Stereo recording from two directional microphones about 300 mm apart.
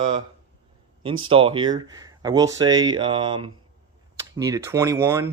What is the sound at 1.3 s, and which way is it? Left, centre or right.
Speech, centre.